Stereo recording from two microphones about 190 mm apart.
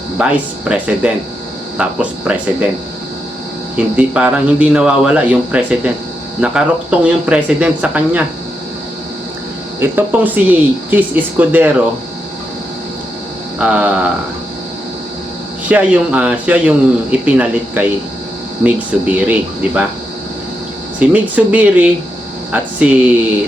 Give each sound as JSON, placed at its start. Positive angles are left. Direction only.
{"t": 0.7, "sound": "speech", "side_deg": -5}
{"t": 3.9, "sound": "speech", "side_deg": -5}
{"t": 9.8, "sound": "speech", "side_deg": -10}
{"t": 13.6, "sound": "speech", "side_deg": -5}
{"t": 15.7, "sound": "speech", "side_deg": -5}
{"t": 21.0, "sound": "speech", "side_deg": -10}